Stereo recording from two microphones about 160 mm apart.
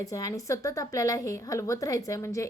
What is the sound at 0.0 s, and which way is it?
A woman's voice, 20° left (ahead or behind).